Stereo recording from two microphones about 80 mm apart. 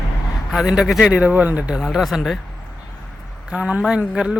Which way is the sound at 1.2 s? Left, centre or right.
Centre.